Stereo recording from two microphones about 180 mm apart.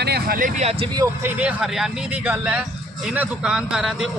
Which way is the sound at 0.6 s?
35° right (ahead or behind).